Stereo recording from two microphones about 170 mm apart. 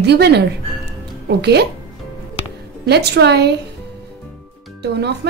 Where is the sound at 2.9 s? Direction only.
75° right (ahead or behind).